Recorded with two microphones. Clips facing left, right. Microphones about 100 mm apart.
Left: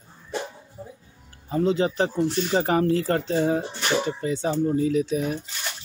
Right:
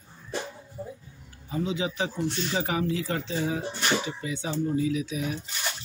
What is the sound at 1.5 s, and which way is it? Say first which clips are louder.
Speech: left 7 dB; 45° left (ahead or behind).